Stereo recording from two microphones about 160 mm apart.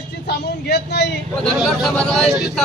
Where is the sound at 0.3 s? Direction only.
90° left.